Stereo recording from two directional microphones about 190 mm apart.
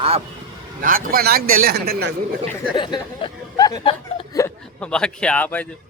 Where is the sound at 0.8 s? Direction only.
50° right (ahead or behind).